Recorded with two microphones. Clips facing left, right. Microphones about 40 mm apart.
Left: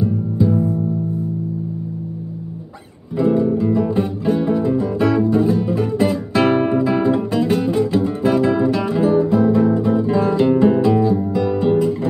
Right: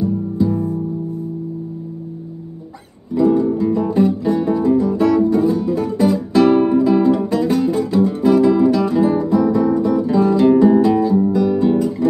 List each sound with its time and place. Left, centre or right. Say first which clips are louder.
0.0 s music: even; left
3.2 s music: right 2 dB; left
11.3 s guitar: right 2 dB; left